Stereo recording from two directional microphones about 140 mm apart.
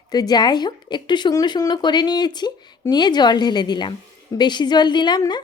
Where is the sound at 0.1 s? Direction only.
30° left (ahead or behind).